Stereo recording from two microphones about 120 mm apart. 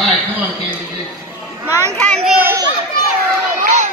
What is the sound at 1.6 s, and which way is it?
Speech, 20° right (ahead or behind).